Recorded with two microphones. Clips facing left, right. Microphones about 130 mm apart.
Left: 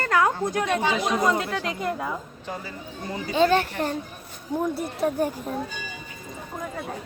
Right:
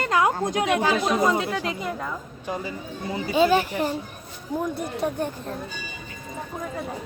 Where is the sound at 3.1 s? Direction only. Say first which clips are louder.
Right 1 dB; 5° right (ahead or behind).